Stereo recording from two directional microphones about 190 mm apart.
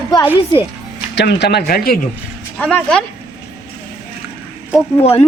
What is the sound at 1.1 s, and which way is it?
Speech, 65° left (ahead or behind).